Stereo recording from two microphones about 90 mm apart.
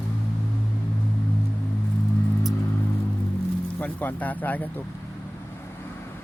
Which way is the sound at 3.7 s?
20° left (ahead or behind).